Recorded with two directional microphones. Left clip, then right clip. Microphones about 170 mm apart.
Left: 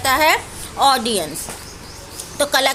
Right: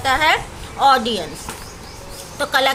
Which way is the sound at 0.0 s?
30° left (ahead or behind).